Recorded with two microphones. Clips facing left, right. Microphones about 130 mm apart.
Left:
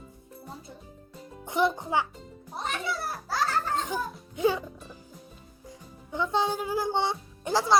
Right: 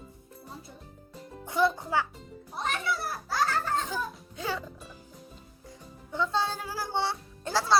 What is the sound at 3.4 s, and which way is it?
Music, 20° left (ahead or behind).